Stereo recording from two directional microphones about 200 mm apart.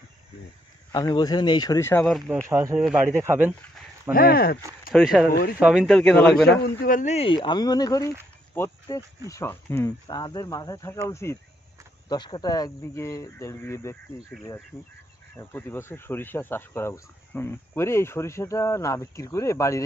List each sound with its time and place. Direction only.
0.9 s speech: 20° left (ahead or behind)
2.0 s speech: centre (ahead or behind)
2.5 s speech: 10° right (ahead or behind)
2.8 s speech: centre (ahead or behind)
3.2 s speech: 10° right (ahead or behind)
4.1 s speech: 50° left (ahead or behind)
4.9 s speech: centre (ahead or behind)
6.6 s speech: 45° left (ahead or behind); by 13.9 s 15° left (ahead or behind)
14.2 s speech: centre (ahead or behind)
14.7 s speech: 10° left (ahead or behind)